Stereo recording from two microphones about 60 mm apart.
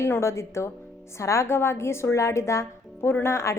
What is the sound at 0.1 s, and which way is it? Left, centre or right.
A woman's voice, left.